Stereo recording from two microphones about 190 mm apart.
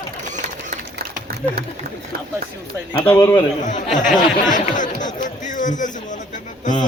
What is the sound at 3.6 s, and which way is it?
Speech, 40° left (ahead or behind).